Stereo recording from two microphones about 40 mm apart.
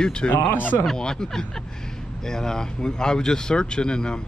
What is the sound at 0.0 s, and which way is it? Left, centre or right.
Speech, left.